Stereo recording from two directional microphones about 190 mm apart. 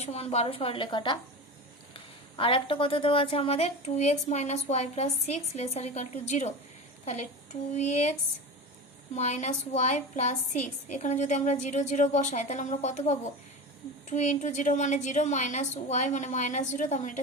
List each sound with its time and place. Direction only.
0.0 s a woman's voice: 35° left (ahead or behind)
9.1 s a woman's voice: 35° left (ahead or behind)